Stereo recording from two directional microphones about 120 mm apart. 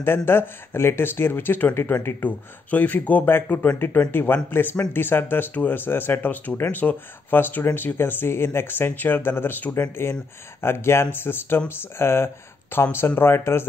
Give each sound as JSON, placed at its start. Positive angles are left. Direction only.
{"t": 0.0, "sound": "speech", "side_deg": 20}